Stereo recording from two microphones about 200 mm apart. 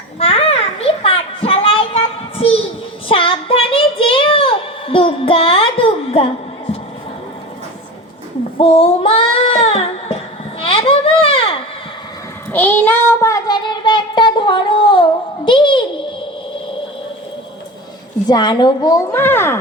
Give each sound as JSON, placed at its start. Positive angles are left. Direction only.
{"t": 0.2, "sound": "children playing", "side_deg": 30}
{"t": 3.1, "sound": "child singing", "side_deg": 25}
{"t": 8.5, "sound": "child singing", "side_deg": 30}
{"t": 10.6, "sound": "a sound", "side_deg": 30}
{"t": 12.5, "sound": "child singing", "side_deg": 10}
{"t": 15.4, "sound": "a sound", "side_deg": 25}
{"t": 18.3, "sound": "a woman's voice", "side_deg": 20}